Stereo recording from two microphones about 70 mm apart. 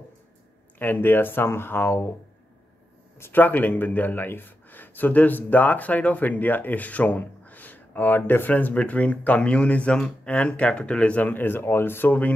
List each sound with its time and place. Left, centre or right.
0.7 s speech: left
3.2 s a man's voice: left